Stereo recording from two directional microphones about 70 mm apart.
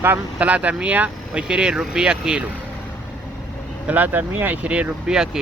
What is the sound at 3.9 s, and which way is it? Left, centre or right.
Speech, right.